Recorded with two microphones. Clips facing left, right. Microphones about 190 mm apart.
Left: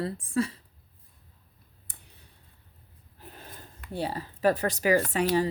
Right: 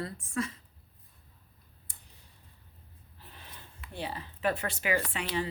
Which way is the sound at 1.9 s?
60° left (ahead or behind).